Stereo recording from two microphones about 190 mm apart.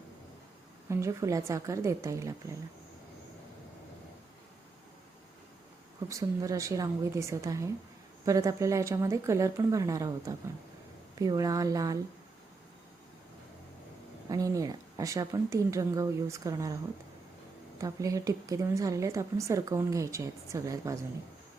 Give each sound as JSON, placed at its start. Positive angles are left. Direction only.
{"t": 0.9, "sound": "a woman's voice", "side_deg": -15}
{"t": 6.1, "sound": "a woman's voice", "side_deg": -15}
{"t": 14.3, "sound": "a woman's voice", "side_deg": -20}
{"t": 17.7, "sound": "a woman's voice", "side_deg": -15}